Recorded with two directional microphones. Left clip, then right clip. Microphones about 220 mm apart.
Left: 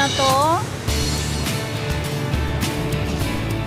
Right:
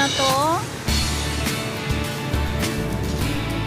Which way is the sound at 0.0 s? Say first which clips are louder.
Left 2 dB; centre (ahead or behind).